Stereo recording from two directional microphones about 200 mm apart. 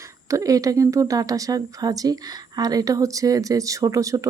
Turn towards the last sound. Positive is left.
turn(degrees=-15)  # may be behind; listen again after turning